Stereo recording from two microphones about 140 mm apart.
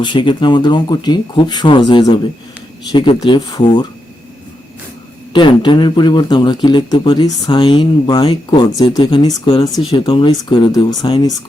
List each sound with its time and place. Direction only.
0.0 s speech: 35° left (ahead or behind)
5.3 s speech: 35° left (ahead or behind)